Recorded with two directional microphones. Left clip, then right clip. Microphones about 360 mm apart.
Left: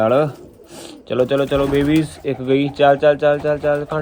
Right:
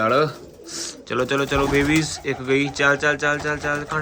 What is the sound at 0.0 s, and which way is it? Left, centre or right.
A man's voice, centre.